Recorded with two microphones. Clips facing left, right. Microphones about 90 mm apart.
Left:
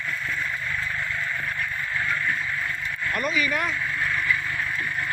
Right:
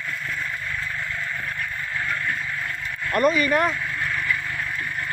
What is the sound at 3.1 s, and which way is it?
Speech, 45° right (ahead or behind).